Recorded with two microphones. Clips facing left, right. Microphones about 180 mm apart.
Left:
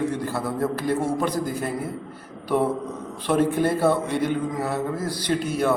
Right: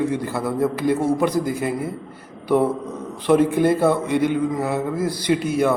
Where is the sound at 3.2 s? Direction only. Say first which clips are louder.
Right 5 dB; 15° right (ahead or behind).